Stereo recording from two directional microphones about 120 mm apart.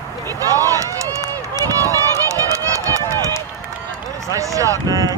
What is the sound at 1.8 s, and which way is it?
Run, 25° right (ahead or behind).